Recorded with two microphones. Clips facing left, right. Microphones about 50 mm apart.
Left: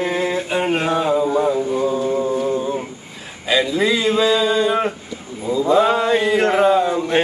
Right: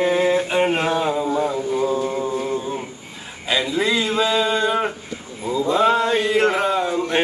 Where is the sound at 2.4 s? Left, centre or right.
Centre.